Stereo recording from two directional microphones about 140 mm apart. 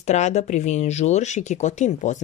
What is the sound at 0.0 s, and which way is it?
Speech, 55° left (ahead or behind).